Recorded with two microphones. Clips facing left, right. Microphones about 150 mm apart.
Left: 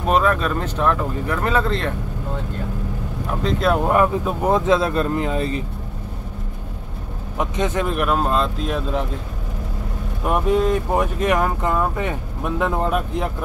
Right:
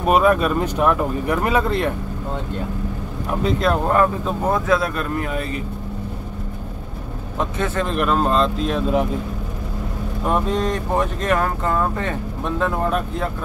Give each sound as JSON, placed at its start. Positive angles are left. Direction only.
{"t": 0.0, "sound": "speech", "side_deg": -10}
{"t": 3.4, "sound": "speech", "side_deg": 0}
{"t": 7.3, "sound": "speech", "side_deg": 15}
{"t": 10.2, "sound": "speech", "side_deg": 10}